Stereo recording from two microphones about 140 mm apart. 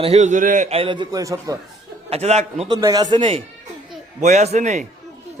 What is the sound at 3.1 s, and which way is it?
Speech, 40° right (ahead or behind).